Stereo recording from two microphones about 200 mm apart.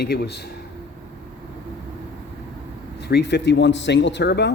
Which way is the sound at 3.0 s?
55° left (ahead or behind).